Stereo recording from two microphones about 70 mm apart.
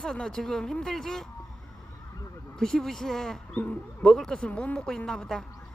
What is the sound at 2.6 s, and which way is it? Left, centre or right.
Speech, centre.